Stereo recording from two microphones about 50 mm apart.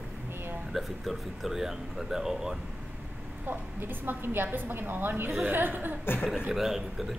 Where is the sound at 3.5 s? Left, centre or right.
Right.